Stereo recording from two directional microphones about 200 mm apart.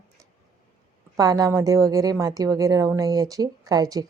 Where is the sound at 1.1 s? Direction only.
20° right (ahead or behind).